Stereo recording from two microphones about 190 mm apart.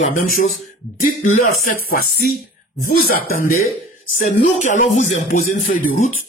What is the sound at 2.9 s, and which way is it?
Speech, 50° left (ahead or behind).